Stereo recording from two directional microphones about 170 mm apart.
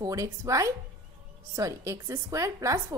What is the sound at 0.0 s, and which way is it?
A woman's voice, 20° right (ahead or behind).